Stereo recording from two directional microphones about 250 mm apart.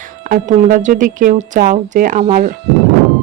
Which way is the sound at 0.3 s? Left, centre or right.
Right.